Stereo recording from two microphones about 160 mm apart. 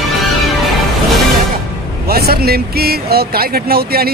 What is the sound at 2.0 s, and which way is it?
Speech, 75° right (ahead or behind).